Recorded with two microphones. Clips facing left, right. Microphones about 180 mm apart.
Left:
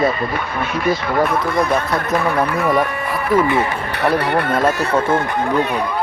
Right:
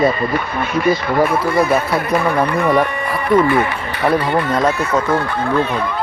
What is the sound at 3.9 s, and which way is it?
Speech, 65° left (ahead or behind).